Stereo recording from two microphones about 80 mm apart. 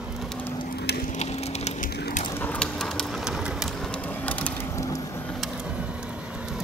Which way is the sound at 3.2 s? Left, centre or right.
Centre.